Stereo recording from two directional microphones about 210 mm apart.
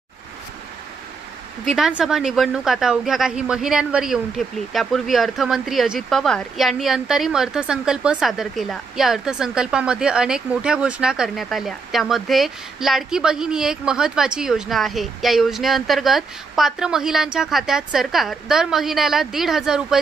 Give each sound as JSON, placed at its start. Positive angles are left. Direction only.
{"t": 1.7, "sound": "a woman's voice", "side_deg": -5}